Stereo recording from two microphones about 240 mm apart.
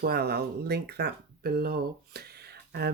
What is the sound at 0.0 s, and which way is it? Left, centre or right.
Speech, right.